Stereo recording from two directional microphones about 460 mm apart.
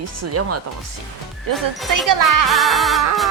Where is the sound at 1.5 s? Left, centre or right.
Right.